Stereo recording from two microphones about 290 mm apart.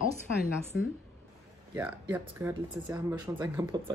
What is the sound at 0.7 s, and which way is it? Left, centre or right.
Speech, left.